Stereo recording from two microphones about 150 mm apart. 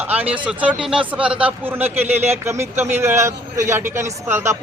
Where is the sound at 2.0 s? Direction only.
45° right (ahead or behind).